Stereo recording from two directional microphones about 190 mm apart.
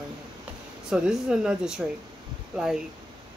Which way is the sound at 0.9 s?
5° right (ahead or behind).